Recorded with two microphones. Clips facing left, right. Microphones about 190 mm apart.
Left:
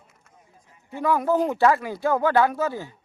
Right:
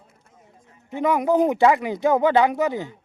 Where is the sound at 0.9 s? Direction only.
20° right (ahead or behind).